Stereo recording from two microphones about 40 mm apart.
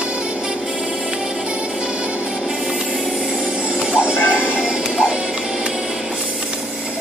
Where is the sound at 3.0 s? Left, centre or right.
Centre.